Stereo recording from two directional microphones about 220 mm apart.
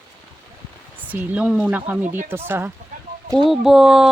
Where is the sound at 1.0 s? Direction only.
5° right (ahead or behind).